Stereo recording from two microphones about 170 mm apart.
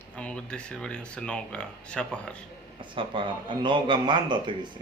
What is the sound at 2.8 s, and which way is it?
Speech, 30° right (ahead or behind).